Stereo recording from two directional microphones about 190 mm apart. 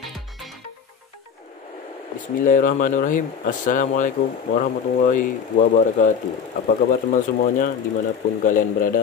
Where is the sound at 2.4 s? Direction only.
45° left (ahead or behind).